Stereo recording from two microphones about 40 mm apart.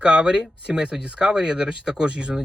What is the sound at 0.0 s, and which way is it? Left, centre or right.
Speech, right.